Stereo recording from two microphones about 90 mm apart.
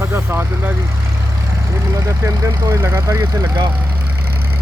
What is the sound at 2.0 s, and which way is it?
Speech, 30° right (ahead or behind).